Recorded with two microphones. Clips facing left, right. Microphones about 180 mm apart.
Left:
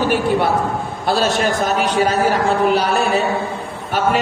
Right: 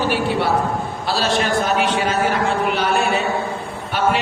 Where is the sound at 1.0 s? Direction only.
45° left (ahead or behind).